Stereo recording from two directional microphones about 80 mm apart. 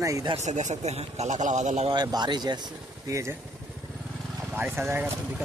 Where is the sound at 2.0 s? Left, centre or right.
Right.